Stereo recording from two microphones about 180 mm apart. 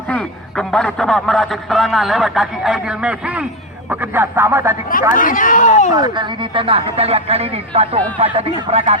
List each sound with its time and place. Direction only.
0.1 s a man's voice: 5° left (ahead or behind); by 4.8 s 15° right (ahead or behind)
4.9 s speech: 50° left (ahead or behind)
5.9 s speech: 25° right (ahead or behind)